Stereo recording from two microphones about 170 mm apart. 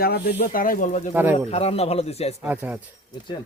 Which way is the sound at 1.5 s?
35° left (ahead or behind).